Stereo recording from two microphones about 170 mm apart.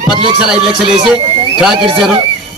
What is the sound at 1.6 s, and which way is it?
Speech, 5° right (ahead or behind).